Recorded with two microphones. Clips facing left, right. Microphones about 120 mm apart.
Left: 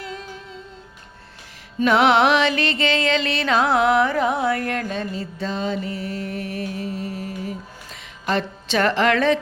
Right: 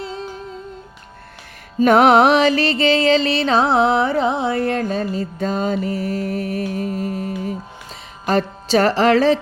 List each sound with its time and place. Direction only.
0.0 s humming: 30° right (ahead or behind)
1.8 s music: 45° right (ahead or behind)